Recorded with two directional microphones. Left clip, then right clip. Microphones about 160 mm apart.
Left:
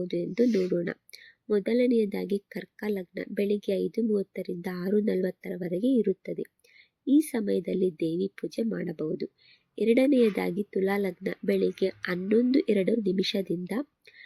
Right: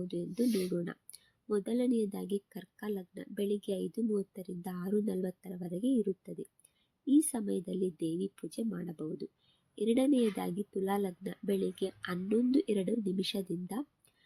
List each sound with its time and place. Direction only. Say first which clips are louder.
0.0 s speech: left 8 dB; 15° left (ahead or behind)